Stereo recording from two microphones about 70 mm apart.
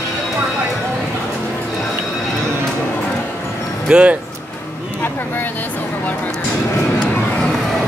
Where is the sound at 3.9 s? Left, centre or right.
Centre.